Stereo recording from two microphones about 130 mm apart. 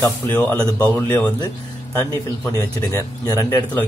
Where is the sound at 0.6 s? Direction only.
20° right (ahead or behind).